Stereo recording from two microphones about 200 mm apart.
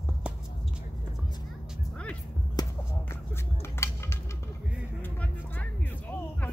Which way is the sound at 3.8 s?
15° left (ahead or behind).